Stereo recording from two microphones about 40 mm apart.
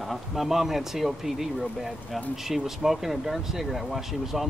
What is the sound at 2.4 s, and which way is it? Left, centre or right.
Speech, centre.